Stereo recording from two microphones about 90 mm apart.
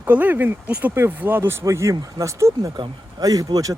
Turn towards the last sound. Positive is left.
turn(degrees=-40)  # may be behind; listen again after turning